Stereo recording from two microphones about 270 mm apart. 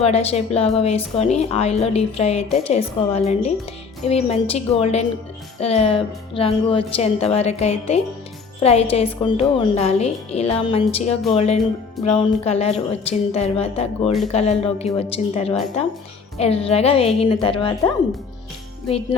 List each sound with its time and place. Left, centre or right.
0.0 s a woman's voice: left